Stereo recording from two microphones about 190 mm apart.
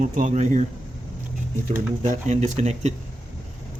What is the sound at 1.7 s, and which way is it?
Speech, 40° right (ahead or behind).